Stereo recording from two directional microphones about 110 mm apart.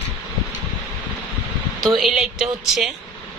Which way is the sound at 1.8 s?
Centre (ahead or behind).